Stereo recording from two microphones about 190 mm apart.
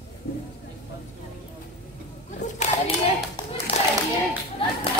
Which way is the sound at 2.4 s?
35° left (ahead or behind).